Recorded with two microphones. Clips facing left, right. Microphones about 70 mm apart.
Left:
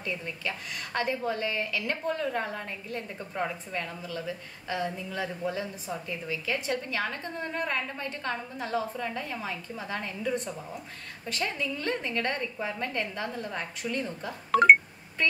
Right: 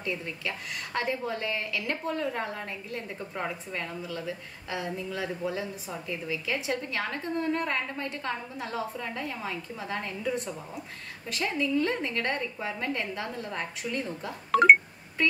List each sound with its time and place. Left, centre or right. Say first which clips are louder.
0.0 s a woman's voice: right 1 dB; centre